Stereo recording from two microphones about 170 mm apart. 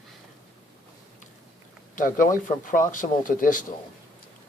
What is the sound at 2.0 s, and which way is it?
Speech, 50° left (ahead or behind).